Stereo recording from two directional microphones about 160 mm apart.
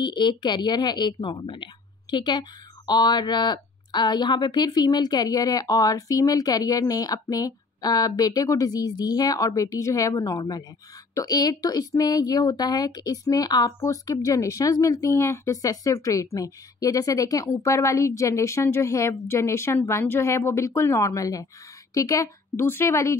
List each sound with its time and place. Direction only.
0.0 s a woman's voice: 30° left (ahead or behind)